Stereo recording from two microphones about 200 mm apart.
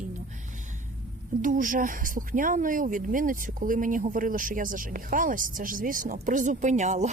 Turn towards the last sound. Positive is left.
turn(degrees=-35)  # may be behind; listen again after turning